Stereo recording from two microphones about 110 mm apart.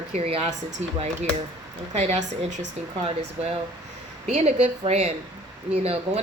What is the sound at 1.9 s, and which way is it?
Speech, 85° right.